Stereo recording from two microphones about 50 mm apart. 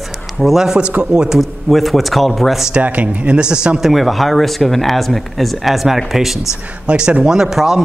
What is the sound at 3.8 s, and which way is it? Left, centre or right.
Speech, centre.